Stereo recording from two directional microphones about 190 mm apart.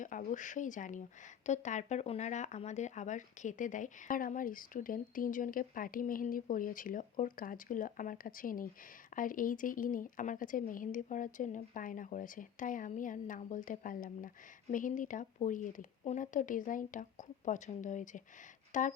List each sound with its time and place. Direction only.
0.0 s speech: 45° left (ahead or behind)